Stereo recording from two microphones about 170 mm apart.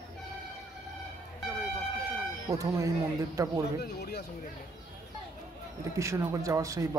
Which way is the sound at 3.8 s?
70° left (ahead or behind).